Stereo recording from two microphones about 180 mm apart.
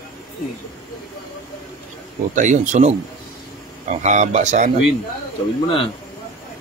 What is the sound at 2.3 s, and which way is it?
Speech, 45° right (ahead or behind).